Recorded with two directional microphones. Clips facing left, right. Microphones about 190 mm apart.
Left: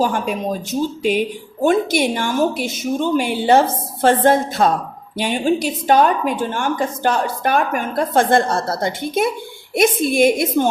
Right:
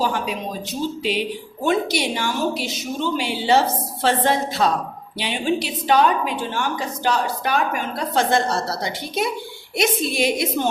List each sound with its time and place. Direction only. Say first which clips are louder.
0.0 s speech: left 4 dB; 50° left (ahead or behind)